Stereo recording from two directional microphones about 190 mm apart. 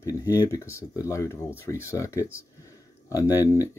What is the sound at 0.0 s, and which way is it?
Speech, 15° left (ahead or behind).